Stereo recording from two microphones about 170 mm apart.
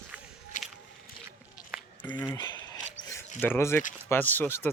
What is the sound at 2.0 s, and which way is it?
Speech, 25° left (ahead or behind).